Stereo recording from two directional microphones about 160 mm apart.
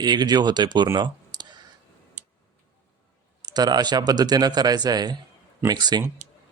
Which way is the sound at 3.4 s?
25° right (ahead or behind).